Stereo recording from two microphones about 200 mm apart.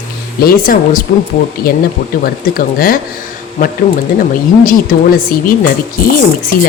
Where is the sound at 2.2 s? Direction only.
45° left (ahead or behind).